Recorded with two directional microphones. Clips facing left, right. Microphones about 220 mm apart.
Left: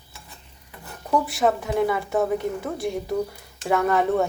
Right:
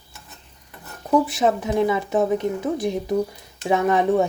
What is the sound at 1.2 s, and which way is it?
Speech, 20° right (ahead or behind).